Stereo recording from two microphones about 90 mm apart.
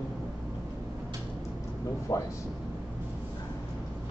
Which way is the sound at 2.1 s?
45° left (ahead or behind).